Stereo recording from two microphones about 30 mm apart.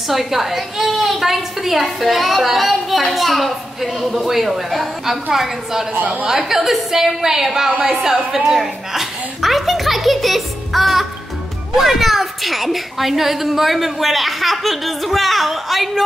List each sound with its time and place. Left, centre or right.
0.1 s a woman's voice: centre
5.9 s a woman's voice: right
6.2 s a woman's voice: centre
9.4 s a child's voice: centre